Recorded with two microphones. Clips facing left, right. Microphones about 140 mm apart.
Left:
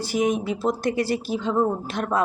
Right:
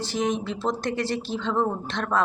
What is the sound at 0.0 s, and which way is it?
Speech, 10° left (ahead or behind).